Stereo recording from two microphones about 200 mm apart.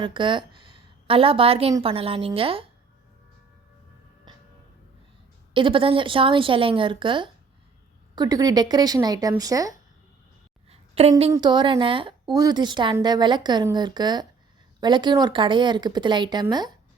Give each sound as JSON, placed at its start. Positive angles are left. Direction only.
{"t": 0.0, "sound": "a woman's voice", "side_deg": -25}
{"t": 5.5, "sound": "a woman's voice", "side_deg": -25}
{"t": 10.7, "sound": "a sound", "side_deg": -30}
{"t": 11.3, "sound": "a woman's voice", "side_deg": -20}